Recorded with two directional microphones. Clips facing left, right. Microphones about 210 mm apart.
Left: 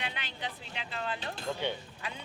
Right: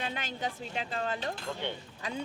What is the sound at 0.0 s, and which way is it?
Speech, 45° right (ahead or behind).